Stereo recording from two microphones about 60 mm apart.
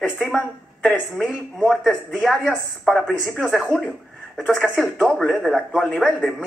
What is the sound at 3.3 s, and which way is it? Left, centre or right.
Speech, centre.